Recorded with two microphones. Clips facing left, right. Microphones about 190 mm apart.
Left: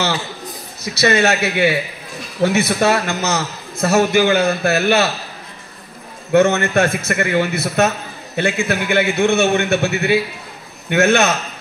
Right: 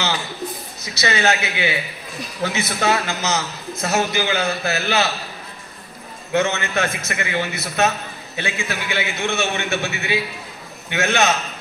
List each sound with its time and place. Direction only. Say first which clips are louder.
0.9 s a man's voice: left 5 dB; 55° left (ahead or behind)
6.3 s a man's voice: left 7 dB; 50° left (ahead or behind)